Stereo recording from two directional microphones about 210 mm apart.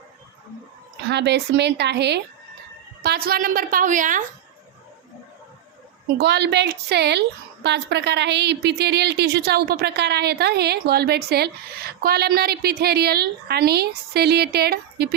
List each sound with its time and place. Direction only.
1.0 s a woman's voice: 55° right (ahead or behind); by 4.3 s 40° right (ahead or behind)
6.1 s a woman's voice: 55° right (ahead or behind)